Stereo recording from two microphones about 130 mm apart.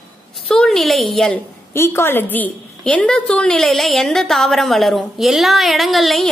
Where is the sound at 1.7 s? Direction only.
20° left (ahead or behind).